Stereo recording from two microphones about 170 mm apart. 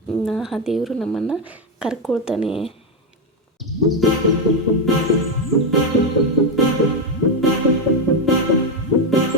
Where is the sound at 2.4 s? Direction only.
35° left (ahead or behind).